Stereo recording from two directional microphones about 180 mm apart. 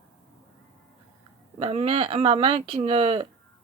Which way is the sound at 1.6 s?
35° right (ahead or behind).